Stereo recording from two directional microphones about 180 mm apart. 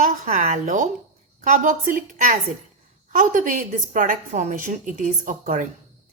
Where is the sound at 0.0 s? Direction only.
45° right (ahead or behind).